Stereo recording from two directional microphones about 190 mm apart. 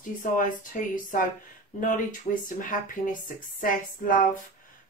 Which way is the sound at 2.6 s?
45° left (ahead or behind).